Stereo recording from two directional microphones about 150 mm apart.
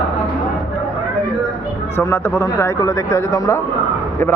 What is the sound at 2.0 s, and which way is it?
Speech, 15° left (ahead or behind).